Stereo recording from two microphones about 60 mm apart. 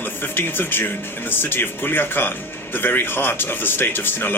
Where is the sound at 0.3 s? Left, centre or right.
Left.